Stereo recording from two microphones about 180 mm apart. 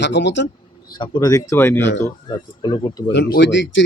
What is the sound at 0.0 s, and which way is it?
Speech, 75° left (ahead or behind).